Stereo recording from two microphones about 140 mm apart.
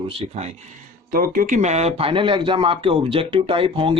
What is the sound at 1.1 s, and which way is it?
Speech, 90° right.